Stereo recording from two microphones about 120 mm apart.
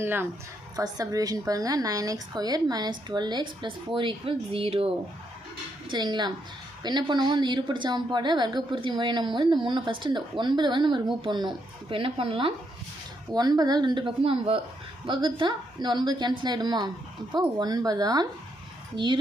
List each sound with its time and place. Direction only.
0.0 s a woman's voice: 20° right (ahead or behind)
0.8 s a woman's voice: 30° right (ahead or behind); by 4.9 s 50° right (ahead or behind)
5.9 s a woman's voice: 40° right (ahead or behind)
13.3 s a woman's voice: 35° right (ahead or behind)